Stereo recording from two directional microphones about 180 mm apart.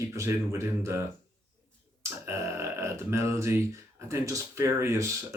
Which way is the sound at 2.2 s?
15° right (ahead or behind).